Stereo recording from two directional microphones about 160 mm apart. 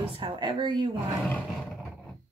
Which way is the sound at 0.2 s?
30° right (ahead or behind).